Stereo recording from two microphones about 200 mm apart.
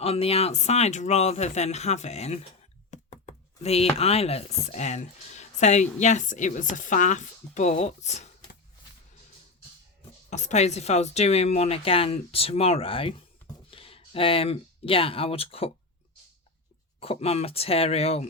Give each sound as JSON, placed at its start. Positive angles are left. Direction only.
{"t": 0.0, "sound": "a woman's voice", "side_deg": 30}
{"t": 10.2, "sound": "a woman's voice", "side_deg": 35}
{"t": 17.0, "sound": "speech", "side_deg": 30}